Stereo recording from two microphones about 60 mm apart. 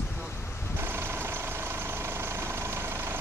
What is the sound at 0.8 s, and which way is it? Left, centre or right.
Vehicle, right.